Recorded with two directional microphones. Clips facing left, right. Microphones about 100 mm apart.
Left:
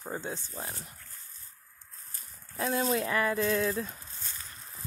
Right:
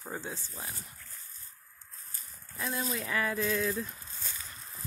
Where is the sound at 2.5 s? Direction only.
35° left (ahead or behind).